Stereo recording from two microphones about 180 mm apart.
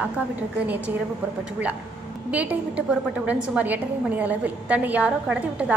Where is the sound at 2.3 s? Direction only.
10° right (ahead or behind).